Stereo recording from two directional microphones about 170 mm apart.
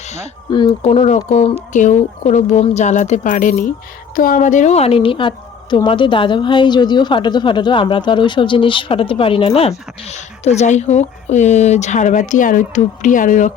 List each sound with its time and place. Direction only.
0.5 s a woman's voice: 30° left (ahead or behind); by 13.5 s 50° left (ahead or behind)